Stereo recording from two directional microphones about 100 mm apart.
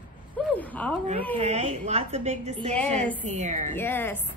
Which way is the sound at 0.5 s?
15° left (ahead or behind).